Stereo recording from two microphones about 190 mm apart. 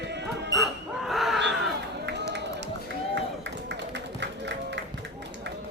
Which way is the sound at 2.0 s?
65° right (ahead or behind).